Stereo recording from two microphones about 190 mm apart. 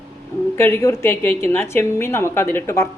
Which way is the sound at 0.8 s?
15° left (ahead or behind).